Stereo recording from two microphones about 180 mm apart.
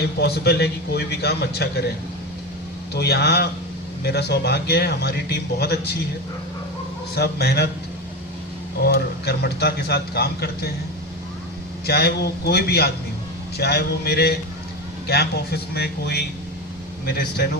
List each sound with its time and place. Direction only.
0.2 s speech: 65° left (ahead or behind)
2.9 s speech: 65° left (ahead or behind)
7.2 s speech: 65° left (ahead or behind)
8.8 s speech: 60° left (ahead or behind)
11.9 s speech: 60° left (ahead or behind)